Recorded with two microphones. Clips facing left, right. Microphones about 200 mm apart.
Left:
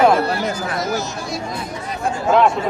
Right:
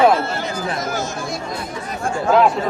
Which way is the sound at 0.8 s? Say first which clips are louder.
Left 1 dB; 50° right (ahead or behind).